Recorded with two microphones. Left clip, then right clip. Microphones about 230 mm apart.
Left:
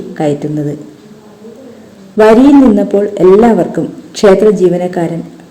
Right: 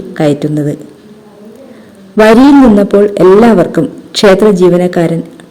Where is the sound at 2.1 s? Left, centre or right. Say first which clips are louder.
Right 1 dB; right.